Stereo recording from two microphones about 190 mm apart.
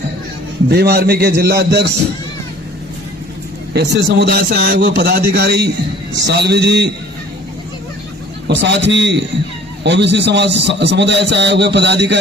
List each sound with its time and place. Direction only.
0.7 s a man's voice: 55° right (ahead or behind)
3.7 s a man's voice: 60° right (ahead or behind)
8.4 s a man's voice: 65° right (ahead or behind)